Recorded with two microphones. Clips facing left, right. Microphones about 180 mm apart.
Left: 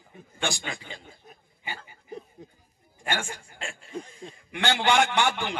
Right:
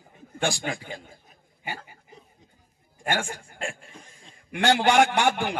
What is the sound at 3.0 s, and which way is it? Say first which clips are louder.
A man's voice: right 3 dB; 45° right (ahead or behind).